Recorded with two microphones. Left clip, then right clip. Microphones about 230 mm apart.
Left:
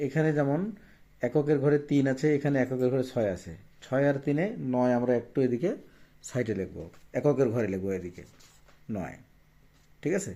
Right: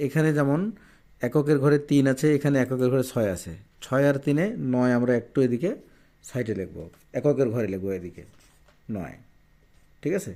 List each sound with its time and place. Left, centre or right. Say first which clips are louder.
0.0 s a man's voice: right 3 dB; right